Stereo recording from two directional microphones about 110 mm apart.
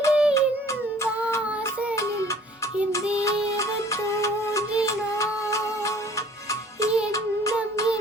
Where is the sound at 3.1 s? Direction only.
30° left (ahead or behind).